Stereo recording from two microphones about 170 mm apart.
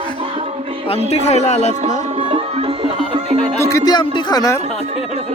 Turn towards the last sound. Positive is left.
turn(degrees=20)  # may be behind; listen again after turning